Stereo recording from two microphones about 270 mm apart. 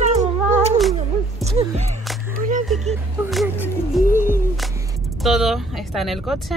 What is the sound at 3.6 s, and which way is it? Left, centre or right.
Music, centre.